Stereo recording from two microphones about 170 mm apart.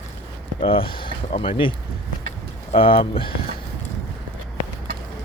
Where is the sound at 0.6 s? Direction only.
30° left (ahead or behind).